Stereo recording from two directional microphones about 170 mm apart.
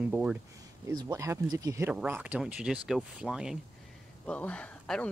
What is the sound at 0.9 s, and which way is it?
Speech, 20° right (ahead or behind).